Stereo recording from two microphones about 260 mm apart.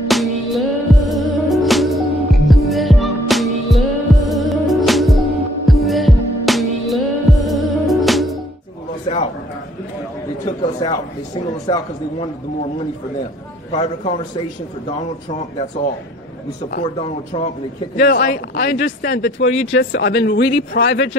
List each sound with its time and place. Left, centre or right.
0.1 s music: centre
9.1 s a sound: left
10.8 s a sound: centre
11.7 s a man's voice: centre
13.7 s a man's voice: left
17.0 s a man's voice: left
18.0 s speech: left